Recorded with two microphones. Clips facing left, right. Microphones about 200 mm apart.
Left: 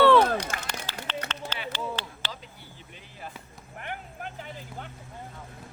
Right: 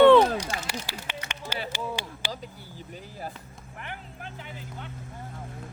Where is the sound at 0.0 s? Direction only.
20° right (ahead or behind).